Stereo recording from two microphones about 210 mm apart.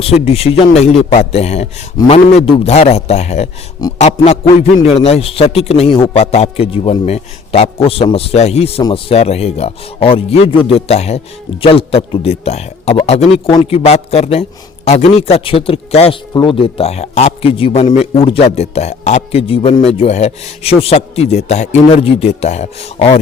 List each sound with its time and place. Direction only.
0.0 s a man's voice: 30° left (ahead or behind)
4.0 s music: 30° left (ahead or behind)
4.8 s a man's voice: 30° left (ahead or behind)